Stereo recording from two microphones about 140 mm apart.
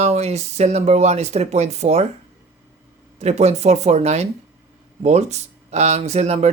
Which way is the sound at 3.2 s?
50° right (ahead or behind).